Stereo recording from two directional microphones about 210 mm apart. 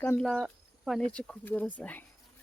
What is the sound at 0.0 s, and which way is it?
Speech, 10° left (ahead or behind).